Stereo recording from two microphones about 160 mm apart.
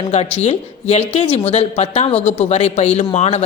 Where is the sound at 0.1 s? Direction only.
45° left (ahead or behind).